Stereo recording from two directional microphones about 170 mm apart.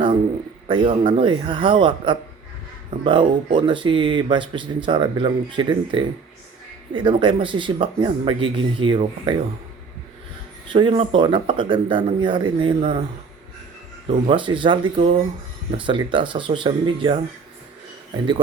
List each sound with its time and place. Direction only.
0.7 s speech: 30° right (ahead or behind)
10.7 s speech: 30° right (ahead or behind)
14.1 s speech: 30° right (ahead or behind)